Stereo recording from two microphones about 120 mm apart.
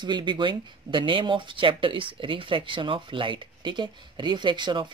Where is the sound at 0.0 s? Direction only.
40° right (ahead or behind).